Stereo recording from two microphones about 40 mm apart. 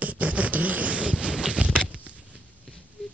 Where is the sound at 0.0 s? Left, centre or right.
Right.